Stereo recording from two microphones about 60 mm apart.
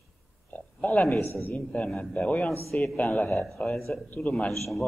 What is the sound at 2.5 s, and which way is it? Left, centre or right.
Speech, centre.